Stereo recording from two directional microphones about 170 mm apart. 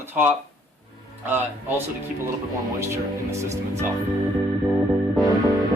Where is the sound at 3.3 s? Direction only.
15° right (ahead or behind).